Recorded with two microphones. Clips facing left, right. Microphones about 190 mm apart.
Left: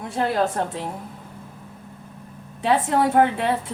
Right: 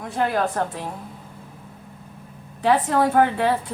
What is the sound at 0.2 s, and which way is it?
Speech, 25° left (ahead or behind).